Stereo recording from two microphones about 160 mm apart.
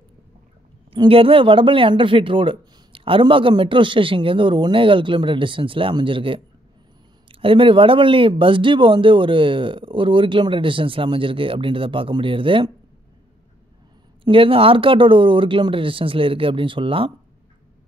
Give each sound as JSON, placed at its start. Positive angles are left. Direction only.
{"t": 0.9, "sound": "speech", "side_deg": -35}
{"t": 14.2, "sound": "speech", "side_deg": -35}